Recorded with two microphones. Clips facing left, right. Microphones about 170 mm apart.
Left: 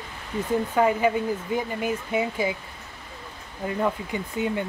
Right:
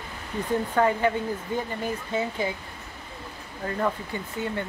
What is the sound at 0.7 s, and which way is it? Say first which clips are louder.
Speech: left 2 dB; 10° left (ahead or behind).